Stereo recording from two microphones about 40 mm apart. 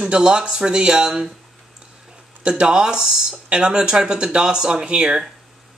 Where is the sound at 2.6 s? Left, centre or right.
Right.